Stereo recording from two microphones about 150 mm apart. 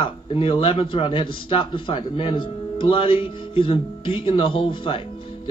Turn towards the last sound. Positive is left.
turn(degrees=35)  # may be behind; listen again after turning